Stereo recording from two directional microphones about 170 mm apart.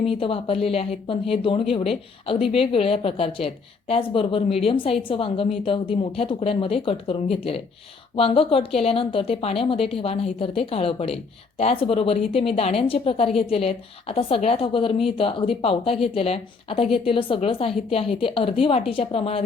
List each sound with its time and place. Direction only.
0.0 s a woman's voice: 35° left (ahead or behind)